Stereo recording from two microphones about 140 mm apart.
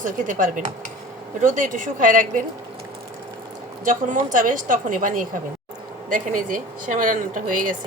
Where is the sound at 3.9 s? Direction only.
70° right (ahead or behind).